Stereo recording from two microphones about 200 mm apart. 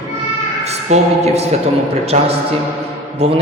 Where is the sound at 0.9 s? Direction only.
30° right (ahead or behind).